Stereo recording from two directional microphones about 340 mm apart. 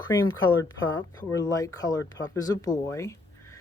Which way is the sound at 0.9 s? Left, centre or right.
Centre.